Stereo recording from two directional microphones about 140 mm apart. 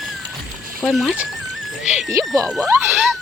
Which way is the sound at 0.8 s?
Centre (ahead or behind).